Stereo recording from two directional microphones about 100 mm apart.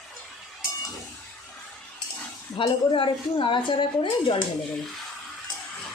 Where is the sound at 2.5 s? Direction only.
60° left (ahead or behind).